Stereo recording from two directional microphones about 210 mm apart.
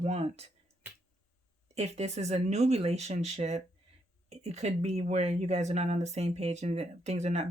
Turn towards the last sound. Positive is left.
turn(degrees=-30)  # may be behind; listen again after turning